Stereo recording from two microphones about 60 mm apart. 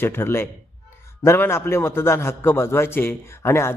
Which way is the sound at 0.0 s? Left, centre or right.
Left.